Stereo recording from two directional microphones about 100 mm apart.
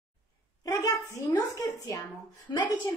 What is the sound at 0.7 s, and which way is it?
Speech, 35° left (ahead or behind).